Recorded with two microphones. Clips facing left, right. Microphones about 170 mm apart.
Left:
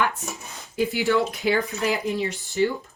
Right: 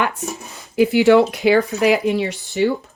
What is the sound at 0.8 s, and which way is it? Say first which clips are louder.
Speech: right 10 dB; 75° right (ahead or behind).